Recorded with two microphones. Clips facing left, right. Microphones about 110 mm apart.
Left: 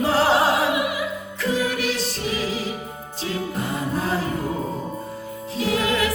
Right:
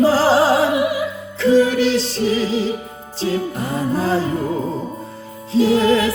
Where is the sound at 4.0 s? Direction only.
30° right (ahead or behind).